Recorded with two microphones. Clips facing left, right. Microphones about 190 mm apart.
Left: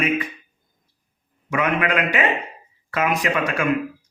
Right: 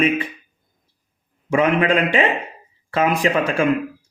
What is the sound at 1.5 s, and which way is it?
A man's voice, 30° right (ahead or behind).